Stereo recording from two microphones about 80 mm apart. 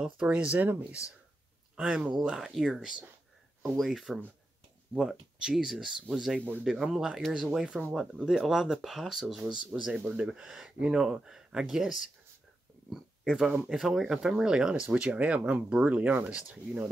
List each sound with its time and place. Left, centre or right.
0.0 s speech: centre
1.8 s speech: centre